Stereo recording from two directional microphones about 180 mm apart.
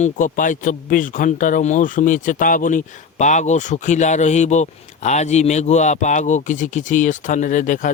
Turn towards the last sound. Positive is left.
turn(degrees=45)  # may be behind; listen again after turning